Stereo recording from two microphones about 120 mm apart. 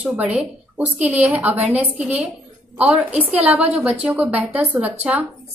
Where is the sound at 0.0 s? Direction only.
10° right (ahead or behind).